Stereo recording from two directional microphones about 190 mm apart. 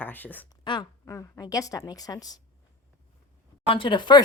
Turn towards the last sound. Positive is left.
turn(degrees=25)  # may be behind; listen again after turning